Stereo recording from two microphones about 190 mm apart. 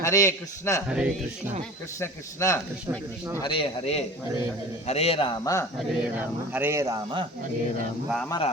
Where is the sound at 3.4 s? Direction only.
30° left (ahead or behind).